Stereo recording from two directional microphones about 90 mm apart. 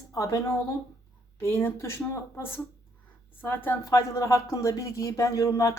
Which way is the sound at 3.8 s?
35° left (ahead or behind).